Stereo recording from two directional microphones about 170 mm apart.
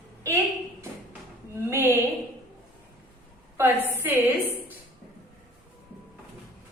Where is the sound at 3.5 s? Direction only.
10° right (ahead or behind).